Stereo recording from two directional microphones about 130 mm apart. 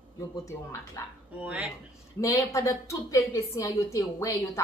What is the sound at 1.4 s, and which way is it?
Speech, 10° right (ahead or behind).